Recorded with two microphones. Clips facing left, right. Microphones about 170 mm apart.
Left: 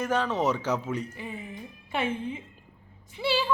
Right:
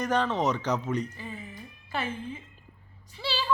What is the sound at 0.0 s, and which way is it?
A woman's voice, 5° left (ahead or behind).